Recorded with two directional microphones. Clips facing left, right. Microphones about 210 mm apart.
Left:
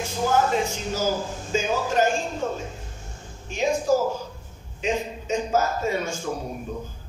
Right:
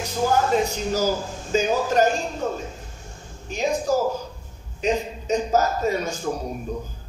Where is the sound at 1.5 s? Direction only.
40° right (ahead or behind).